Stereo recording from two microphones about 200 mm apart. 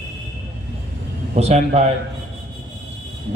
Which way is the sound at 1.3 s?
30° right (ahead or behind).